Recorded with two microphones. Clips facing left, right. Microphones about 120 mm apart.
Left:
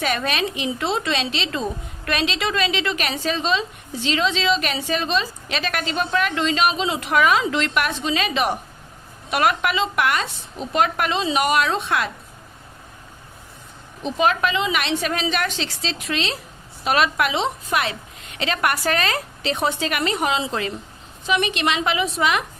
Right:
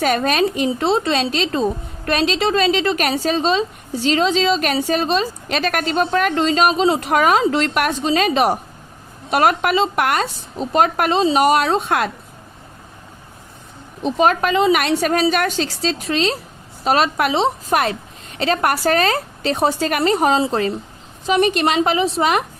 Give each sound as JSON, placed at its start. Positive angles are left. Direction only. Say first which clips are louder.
{"t": 0.0, "sound": "a woman's voice", "louder": "right 6 dB", "side_deg": -40}
{"t": 14.0, "sound": "a woman's voice", "louder": "right 4 dB", "side_deg": -40}